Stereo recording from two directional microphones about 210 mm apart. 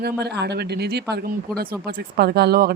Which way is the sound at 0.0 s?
50° right (ahead or behind).